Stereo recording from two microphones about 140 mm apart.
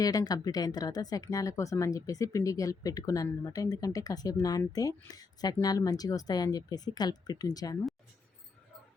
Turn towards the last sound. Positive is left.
turn(degrees=25)  # may be behind; listen again after turning